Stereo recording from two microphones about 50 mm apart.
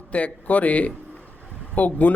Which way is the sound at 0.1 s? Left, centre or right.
Left.